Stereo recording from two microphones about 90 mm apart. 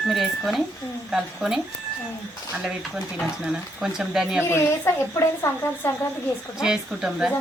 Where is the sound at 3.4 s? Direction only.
10° right (ahead or behind).